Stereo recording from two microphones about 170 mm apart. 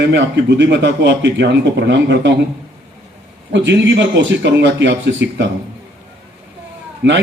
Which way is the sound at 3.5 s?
90° right.